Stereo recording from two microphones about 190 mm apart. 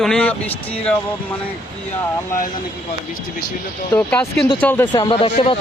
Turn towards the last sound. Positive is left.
turn(degrees=30)  # may be behind; listen again after turning